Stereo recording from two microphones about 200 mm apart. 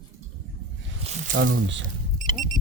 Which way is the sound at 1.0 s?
35° right (ahead or behind).